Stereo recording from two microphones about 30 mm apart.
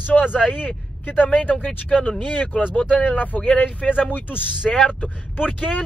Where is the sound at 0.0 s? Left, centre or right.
Left.